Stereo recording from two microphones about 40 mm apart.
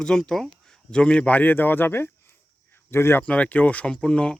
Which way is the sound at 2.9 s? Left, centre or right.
Left.